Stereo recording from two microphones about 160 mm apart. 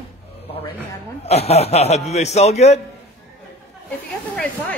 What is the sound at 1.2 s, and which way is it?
A man's voice, 40° left (ahead or behind).